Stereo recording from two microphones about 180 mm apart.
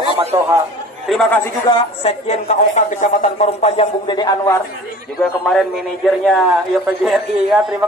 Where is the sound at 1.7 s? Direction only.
35° left (ahead or behind).